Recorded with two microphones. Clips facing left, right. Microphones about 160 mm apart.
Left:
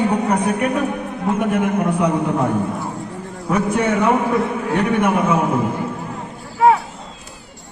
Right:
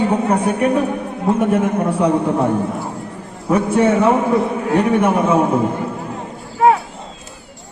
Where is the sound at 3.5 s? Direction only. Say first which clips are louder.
Right 4 dB; 30° right (ahead or behind).